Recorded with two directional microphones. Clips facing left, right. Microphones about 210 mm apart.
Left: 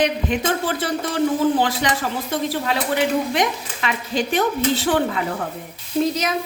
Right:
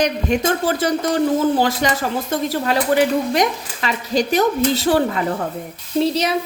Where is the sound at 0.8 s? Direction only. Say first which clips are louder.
Right 3 dB; 45° right (ahead or behind).